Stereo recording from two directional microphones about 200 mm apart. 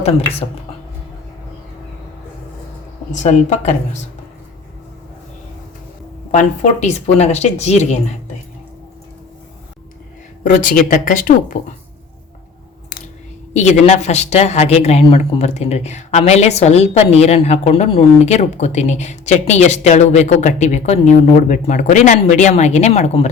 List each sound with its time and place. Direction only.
3.1 s a woman's voice: 40° left (ahead or behind)
6.3 s a woman's voice: 35° left (ahead or behind)
10.4 s a woman's voice: 40° left (ahead or behind)
13.5 s a woman's voice: 35° left (ahead or behind)